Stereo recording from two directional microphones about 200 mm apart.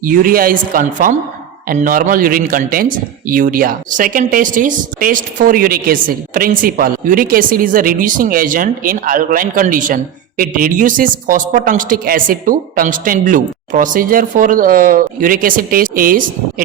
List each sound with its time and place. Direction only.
0.0 s speech: 45° right (ahead or behind)